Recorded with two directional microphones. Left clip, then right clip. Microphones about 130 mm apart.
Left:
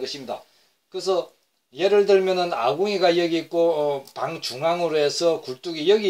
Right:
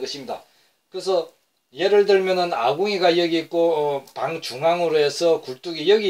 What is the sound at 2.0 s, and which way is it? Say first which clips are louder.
Speech: right 1 dB; 30° left (ahead or behind).